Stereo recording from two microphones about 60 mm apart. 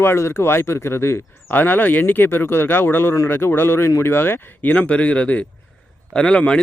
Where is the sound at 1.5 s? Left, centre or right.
Left.